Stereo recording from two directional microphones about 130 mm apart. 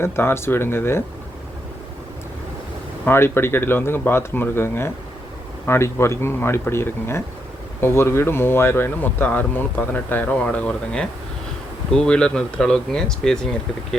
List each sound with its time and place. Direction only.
0.0 s speech: 20° left (ahead or behind)
3.0 s speech: 15° left (ahead or behind)